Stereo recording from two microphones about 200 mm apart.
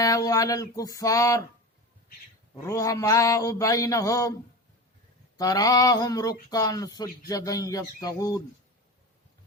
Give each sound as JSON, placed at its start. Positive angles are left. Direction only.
{"t": 0.0, "sound": "mantra", "side_deg": 15}
{"t": 2.6, "sound": "mantra", "side_deg": 15}
{"t": 5.4, "sound": "speech", "side_deg": 20}
{"t": 7.3, "sound": "mantra", "side_deg": 15}